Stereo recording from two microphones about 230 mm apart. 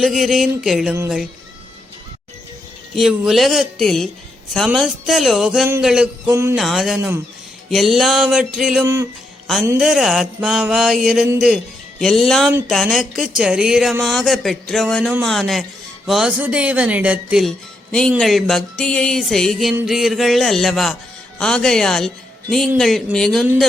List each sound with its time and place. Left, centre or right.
0.0 s speech: centre
2.9 s speech: centre
6.6 s a man's voice: centre